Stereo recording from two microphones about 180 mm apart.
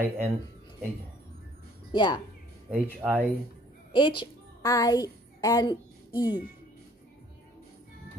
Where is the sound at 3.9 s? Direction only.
25° left (ahead or behind).